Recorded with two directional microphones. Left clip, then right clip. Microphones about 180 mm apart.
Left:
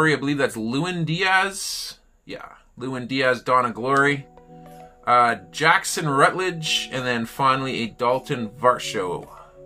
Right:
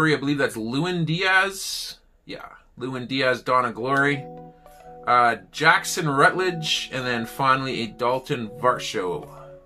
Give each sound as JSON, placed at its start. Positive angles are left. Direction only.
{"t": 0.0, "sound": "speech", "side_deg": 15}